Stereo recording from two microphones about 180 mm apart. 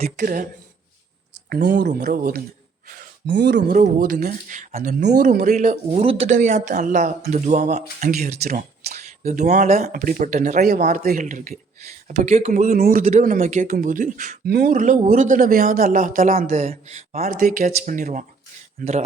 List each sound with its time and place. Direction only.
0.0 s speech: 45° right (ahead or behind)
1.5 s speech: 55° right (ahead or behind)
2.0 s speech: 55° right (ahead or behind)
3.2 s speech: 75° right (ahead or behind)
3.7 s speech: 50° right (ahead or behind)
14.4 s a man's voice: 60° right (ahead or behind); by 17.3 s 35° right (ahead or behind)
17.4 s a man's voice: 50° right (ahead or behind)